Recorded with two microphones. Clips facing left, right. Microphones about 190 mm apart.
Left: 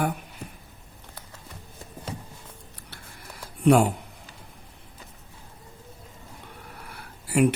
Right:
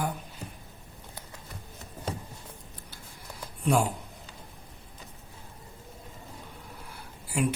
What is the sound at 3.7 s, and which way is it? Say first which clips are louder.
Speech: left 7 dB; 65° left (ahead or behind).